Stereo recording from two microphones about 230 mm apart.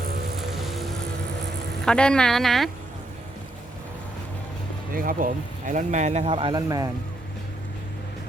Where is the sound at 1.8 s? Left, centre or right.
Centre.